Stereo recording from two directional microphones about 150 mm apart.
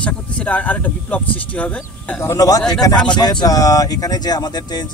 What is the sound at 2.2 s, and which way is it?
Speech, 20° left (ahead or behind).